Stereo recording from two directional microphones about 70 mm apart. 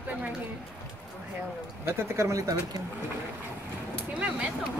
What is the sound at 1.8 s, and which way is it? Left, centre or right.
Speech, right.